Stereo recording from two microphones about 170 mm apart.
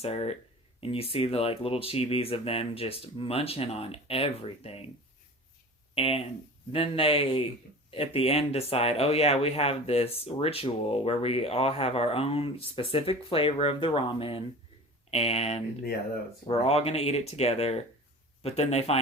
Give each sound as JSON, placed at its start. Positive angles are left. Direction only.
{"t": 0.0, "sound": "speech", "side_deg": 35}
{"t": 5.9, "sound": "speech", "side_deg": 35}